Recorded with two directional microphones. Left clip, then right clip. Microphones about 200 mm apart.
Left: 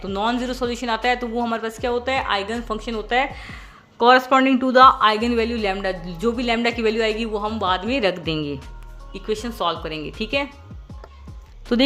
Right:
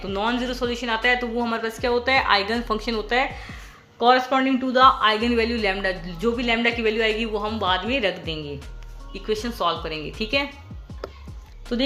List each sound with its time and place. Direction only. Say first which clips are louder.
0.0 s a man's voice: left 2 dB; 20° left (ahead or behind)
3.9 s a man's voice: left 4 dB; 35° left (ahead or behind)
9.1 s a man's voice: even; 20° left (ahead or behind)
11.7 s speech: left 6 dB; 45° left (ahead or behind)